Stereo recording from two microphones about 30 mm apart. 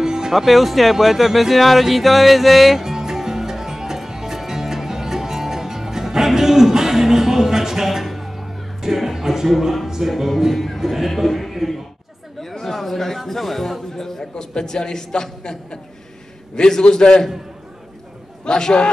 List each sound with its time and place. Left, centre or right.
0.0 s music: right
0.3 s speech: centre
2.8 s music: centre
10.8 s speech: centre
11.1 s a sound: centre
13.3 s a man's voice: centre
13.9 s a man's voice: centre
16.5 s a man's voice: left
18.4 s a man's voice: left